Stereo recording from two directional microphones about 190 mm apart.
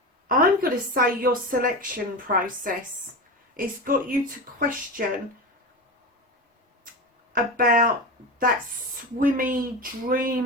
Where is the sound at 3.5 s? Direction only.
45° right (ahead or behind).